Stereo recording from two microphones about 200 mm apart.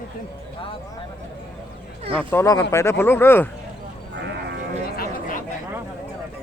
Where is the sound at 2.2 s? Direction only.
10° left (ahead or behind).